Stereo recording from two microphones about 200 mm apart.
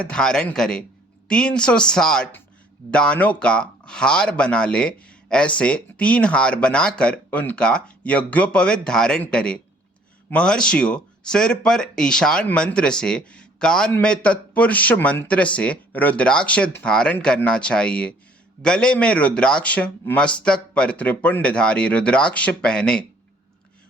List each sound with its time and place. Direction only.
0.0 s speech: 5° left (ahead or behind)